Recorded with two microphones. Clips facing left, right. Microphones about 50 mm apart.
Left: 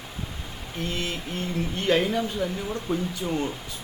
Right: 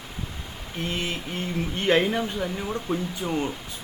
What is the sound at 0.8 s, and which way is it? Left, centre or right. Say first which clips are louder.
Speech: right 1 dB; right.